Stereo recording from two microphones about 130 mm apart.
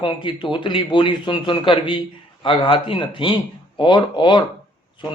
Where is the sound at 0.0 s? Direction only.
40° left (ahead or behind).